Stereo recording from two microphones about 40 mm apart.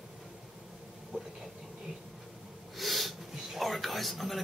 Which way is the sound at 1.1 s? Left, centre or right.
Right.